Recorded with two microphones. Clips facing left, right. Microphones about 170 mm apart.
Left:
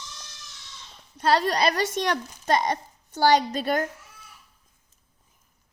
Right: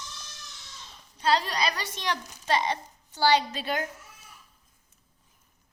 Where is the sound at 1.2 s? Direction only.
50° left (ahead or behind).